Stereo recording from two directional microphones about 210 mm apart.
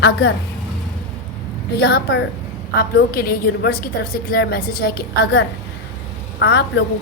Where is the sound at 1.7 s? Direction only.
50° left (ahead or behind).